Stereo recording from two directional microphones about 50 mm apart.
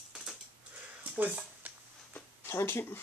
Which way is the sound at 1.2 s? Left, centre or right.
Right.